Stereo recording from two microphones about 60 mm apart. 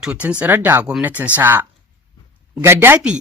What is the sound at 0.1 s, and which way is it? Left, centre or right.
Speech, right.